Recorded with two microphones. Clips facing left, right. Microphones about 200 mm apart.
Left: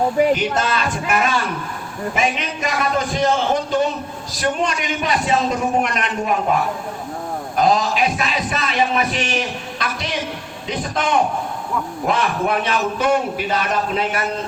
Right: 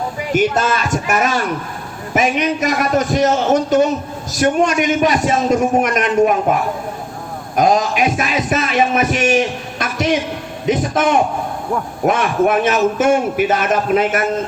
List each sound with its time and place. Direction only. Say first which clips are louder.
0.3 s a man's voice: right 5 dB; 45° right (ahead or behind)
7.5 s a man's voice: right 3 dB; 45° right (ahead or behind)